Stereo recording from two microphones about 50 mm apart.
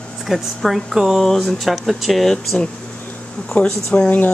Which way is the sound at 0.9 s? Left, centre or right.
Centre.